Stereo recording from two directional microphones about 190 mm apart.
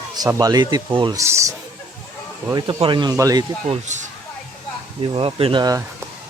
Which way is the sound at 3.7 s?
40° right (ahead or behind).